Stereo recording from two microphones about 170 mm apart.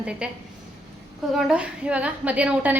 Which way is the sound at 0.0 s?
5° right (ahead or behind).